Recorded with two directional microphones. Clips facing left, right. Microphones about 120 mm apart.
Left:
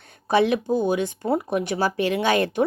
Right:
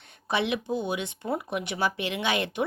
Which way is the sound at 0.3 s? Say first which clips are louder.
Left 8 dB; 40° left (ahead or behind).